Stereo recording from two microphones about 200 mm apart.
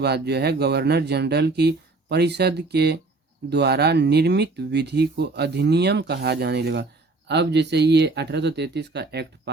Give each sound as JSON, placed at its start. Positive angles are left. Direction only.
{"t": 0.0, "sound": "speech", "side_deg": -55}